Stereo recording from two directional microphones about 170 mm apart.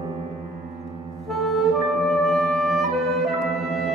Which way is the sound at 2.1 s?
Centre (ahead or behind).